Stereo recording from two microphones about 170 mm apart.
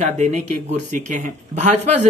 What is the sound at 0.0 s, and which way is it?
Speech, 45° right (ahead or behind).